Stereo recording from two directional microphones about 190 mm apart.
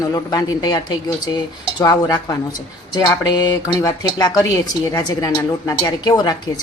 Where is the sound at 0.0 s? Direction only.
20° left (ahead or behind).